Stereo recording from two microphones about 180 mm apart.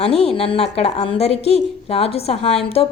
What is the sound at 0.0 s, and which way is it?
A woman's voice, 35° left (ahead or behind).